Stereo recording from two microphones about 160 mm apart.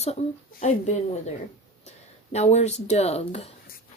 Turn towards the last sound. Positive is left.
turn(degrees=40)  # may be behind; listen again after turning